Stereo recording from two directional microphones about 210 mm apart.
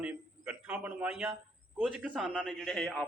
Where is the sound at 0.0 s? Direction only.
5° right (ahead or behind).